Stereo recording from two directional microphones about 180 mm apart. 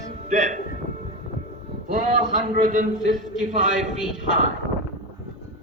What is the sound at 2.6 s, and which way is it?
A man's voice, 45° right (ahead or behind).